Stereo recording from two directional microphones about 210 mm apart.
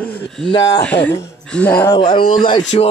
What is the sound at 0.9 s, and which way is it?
Speech, 10° left (ahead or behind).